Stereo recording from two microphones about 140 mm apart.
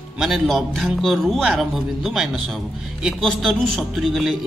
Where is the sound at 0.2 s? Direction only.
Centre (ahead or behind).